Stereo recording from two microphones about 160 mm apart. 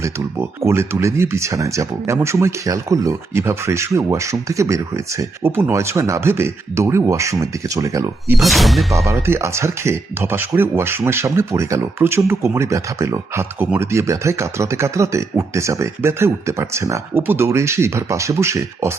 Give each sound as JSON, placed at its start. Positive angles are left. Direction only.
{"t": 0.0, "sound": "speech", "side_deg": -15}
{"t": 8.4, "sound": "speech", "side_deg": 0}
{"t": 9.2, "sound": "speech", "side_deg": -15}